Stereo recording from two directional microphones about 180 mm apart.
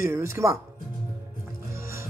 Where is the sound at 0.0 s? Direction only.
15° right (ahead or behind).